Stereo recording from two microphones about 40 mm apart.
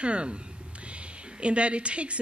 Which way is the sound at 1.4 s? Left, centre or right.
Right.